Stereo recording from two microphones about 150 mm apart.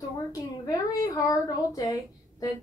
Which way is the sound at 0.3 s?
25° left (ahead or behind).